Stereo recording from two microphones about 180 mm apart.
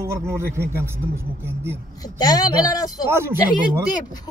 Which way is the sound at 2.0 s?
20° left (ahead or behind).